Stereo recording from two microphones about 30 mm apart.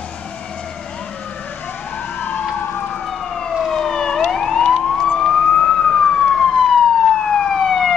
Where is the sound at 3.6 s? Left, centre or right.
Centre.